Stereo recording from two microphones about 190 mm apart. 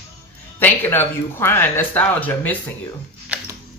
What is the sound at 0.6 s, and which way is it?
Speech, 10° left (ahead or behind).